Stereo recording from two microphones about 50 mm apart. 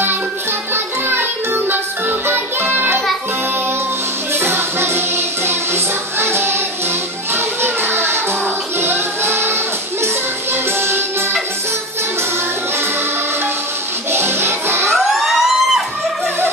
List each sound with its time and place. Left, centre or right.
1.0 s music: right
4.4 s music: right
7.3 s children playing: right
8.7 s music: right
14.1 s music: right
14.9 s emergency vehicle: centre